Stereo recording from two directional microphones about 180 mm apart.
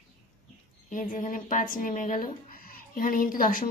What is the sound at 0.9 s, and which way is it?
A woman's voice, 50° left (ahead or behind).